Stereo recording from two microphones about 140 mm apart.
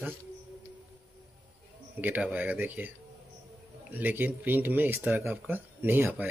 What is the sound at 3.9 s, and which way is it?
Speech, 15° right (ahead or behind).